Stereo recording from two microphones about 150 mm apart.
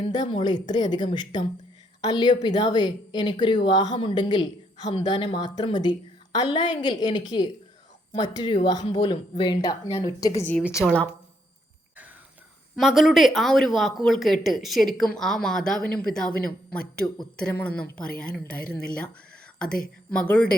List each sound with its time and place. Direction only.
0.1 s a woman's voice: 35° left (ahead or behind)
12.7 s speech: centre (ahead or behind)
17.3 s a woman's voice: 10° left (ahead or behind)
20.1 s a woman's voice: 5° left (ahead or behind)